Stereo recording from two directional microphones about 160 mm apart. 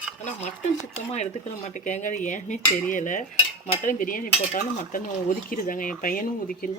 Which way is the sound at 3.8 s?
55° left (ahead or behind).